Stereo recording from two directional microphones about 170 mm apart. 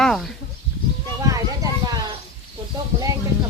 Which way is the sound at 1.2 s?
20° right (ahead or behind).